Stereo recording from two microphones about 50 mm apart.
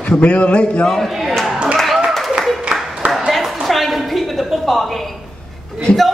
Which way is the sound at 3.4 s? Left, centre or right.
Centre.